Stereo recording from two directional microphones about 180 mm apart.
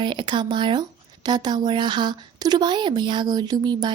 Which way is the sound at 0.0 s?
25° right (ahead or behind).